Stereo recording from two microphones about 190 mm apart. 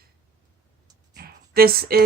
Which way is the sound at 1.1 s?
50° right (ahead or behind).